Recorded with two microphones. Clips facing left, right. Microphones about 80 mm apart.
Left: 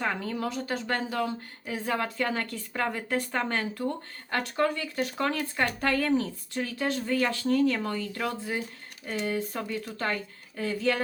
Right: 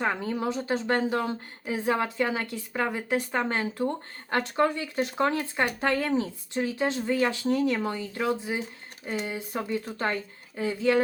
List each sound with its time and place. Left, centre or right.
0.0 s a woman's voice: right